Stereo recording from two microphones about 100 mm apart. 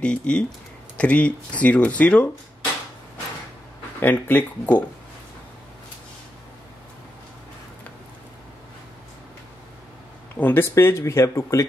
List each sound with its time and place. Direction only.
0.0 s speech: 10° left (ahead or behind)
4.0 s speech: 15° left (ahead or behind)
10.3 s speech: 20° left (ahead or behind)